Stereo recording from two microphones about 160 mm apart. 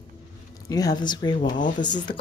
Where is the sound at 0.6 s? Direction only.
25° left (ahead or behind).